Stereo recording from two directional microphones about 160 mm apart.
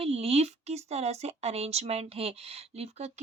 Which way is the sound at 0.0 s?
40° right (ahead or behind).